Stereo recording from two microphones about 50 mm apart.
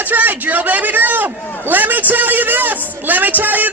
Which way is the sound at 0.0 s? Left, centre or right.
Right.